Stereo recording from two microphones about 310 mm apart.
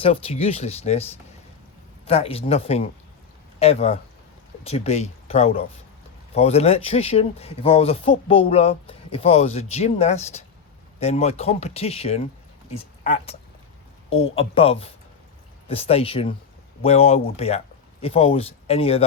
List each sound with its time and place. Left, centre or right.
0.0 s speech: centre
2.0 s speech: centre
14.1 s speech: centre